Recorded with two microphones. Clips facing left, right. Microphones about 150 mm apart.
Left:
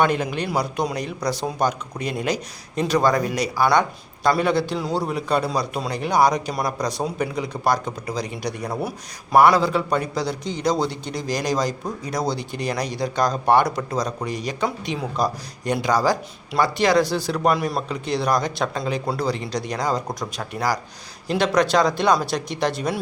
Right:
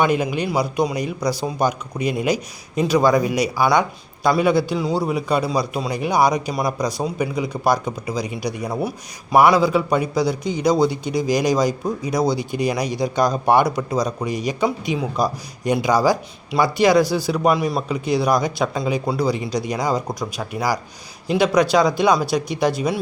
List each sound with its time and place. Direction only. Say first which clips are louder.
0.0 s a man's voice: right 2 dB; 10° right (ahead or behind)